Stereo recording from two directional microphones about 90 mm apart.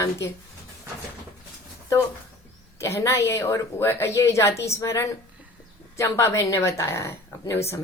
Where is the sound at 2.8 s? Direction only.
30° left (ahead or behind).